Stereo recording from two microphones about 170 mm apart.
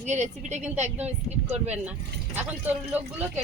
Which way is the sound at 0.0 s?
40° right (ahead or behind).